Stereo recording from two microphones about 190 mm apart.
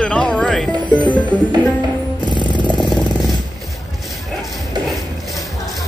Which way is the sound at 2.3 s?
25° left (ahead or behind).